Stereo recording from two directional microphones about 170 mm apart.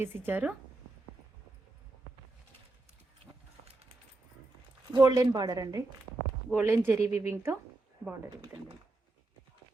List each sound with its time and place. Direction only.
0.0 s speech: 15° right (ahead or behind)
4.9 s a woman's voice: 25° right (ahead or behind)